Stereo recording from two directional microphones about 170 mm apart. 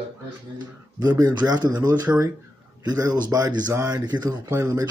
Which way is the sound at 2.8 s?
25° right (ahead or behind).